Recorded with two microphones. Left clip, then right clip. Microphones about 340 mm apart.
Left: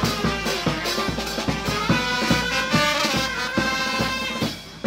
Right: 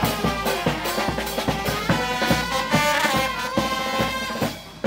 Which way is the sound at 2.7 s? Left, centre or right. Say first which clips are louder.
Right 3 dB; right.